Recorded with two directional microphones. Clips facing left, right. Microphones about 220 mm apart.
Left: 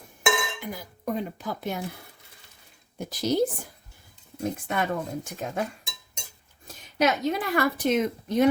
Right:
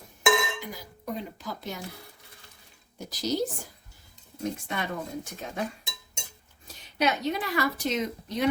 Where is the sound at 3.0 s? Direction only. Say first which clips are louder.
Left 4 dB; 55° left (ahead or behind).